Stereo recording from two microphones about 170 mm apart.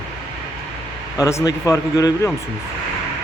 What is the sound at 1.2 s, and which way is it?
Speech, 20° left (ahead or behind).